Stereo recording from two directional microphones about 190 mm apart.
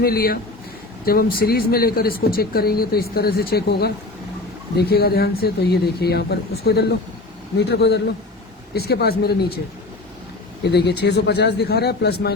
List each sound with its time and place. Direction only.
0.0 s speech: 50° left (ahead or behind)
10.6 s speech: 60° left (ahead or behind)